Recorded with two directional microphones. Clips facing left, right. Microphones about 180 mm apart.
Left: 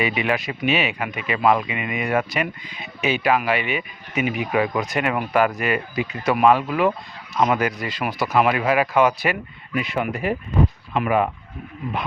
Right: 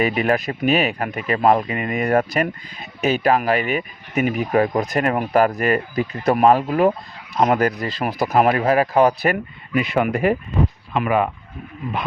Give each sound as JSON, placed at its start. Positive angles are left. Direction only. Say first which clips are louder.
{"t": 0.0, "sound": "speech", "louder": "right 4 dB", "side_deg": -40}
{"t": 9.3, "sound": "speech", "louder": "right 4 dB", "side_deg": -55}